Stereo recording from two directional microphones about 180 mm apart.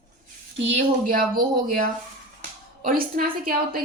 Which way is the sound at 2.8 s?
55° right (ahead or behind).